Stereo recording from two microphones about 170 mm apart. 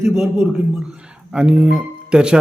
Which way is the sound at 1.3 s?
5° right (ahead or behind).